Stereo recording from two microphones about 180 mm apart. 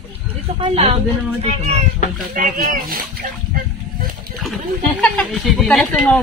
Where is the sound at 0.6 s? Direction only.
35° right (ahead or behind).